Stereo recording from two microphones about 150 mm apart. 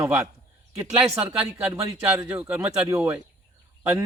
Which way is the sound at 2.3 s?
10° right (ahead or behind).